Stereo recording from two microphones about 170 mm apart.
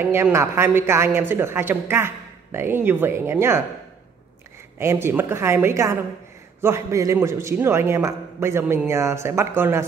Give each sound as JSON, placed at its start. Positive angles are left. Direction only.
{"t": 0.0, "sound": "a man's voice", "side_deg": -15}
{"t": 4.7, "sound": "a man's voice", "side_deg": -15}